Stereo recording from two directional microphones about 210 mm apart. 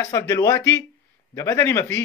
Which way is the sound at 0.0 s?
15° left (ahead or behind).